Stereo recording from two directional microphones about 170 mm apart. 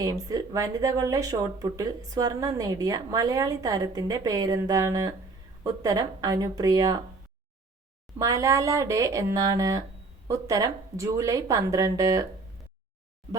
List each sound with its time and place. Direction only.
0.0 s speech: 20° right (ahead or behind)
8.2 s speech: 20° right (ahead or behind)